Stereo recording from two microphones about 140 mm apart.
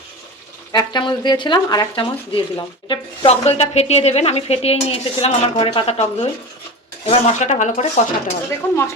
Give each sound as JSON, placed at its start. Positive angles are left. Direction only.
{"t": 0.7, "sound": "speech", "side_deg": 30}
{"t": 3.4, "sound": "speech", "side_deg": 50}
{"t": 8.6, "sound": "speech", "side_deg": 15}